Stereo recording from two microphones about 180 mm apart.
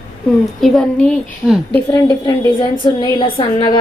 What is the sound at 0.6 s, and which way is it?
Speech, centre (ahead or behind).